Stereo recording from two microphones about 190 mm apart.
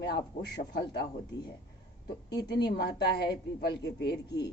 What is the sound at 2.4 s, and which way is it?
Speech, 60° left (ahead or behind).